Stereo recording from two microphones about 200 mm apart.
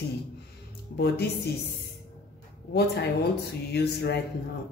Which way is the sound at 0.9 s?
55° left (ahead or behind).